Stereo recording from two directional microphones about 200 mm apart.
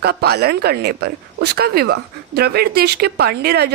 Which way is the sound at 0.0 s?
50° right (ahead or behind).